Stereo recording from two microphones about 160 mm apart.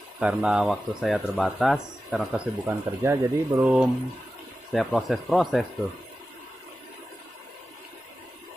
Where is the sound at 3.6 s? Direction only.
5° right (ahead or behind).